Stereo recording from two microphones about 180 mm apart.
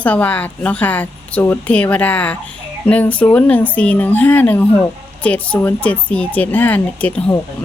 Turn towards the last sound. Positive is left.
turn(degrees=10)  # may be behind; listen again after turning